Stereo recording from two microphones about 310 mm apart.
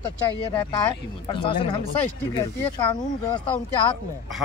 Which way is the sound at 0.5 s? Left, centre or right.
Centre.